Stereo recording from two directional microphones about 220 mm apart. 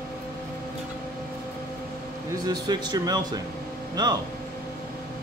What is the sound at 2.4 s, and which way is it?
Speech, 20° right (ahead or behind).